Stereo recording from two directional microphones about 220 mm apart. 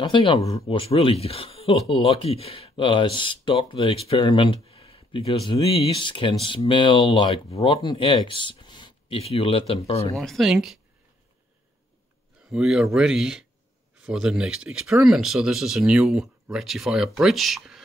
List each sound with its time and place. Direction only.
0.0 s speech: 20° left (ahead or behind)
10.1 s speech: centre (ahead or behind)
12.4 s speech: centre (ahead or behind)